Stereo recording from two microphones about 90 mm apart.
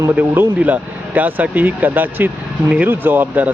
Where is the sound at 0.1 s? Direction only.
15° right (ahead or behind).